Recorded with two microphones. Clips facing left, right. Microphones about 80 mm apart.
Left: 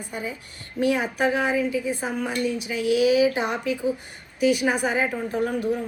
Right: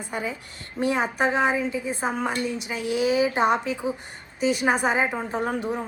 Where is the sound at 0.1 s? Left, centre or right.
Right.